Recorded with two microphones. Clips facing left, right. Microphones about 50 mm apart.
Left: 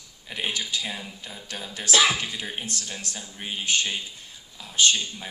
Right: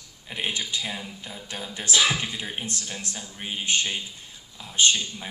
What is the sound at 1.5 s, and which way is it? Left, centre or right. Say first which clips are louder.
Speech: left 2 dB; centre.